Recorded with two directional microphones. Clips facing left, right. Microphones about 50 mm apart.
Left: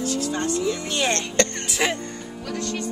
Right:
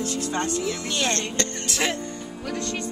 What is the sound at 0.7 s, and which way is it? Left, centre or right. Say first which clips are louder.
Snicker: left 2 dB; centre.